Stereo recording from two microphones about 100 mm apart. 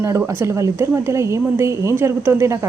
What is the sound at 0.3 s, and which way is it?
A woman's voice, 30° right (ahead or behind).